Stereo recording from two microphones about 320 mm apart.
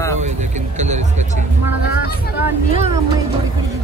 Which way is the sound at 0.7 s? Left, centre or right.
Right.